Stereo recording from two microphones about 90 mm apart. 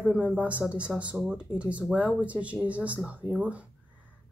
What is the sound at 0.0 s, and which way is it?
Speech, 10° right (ahead or behind).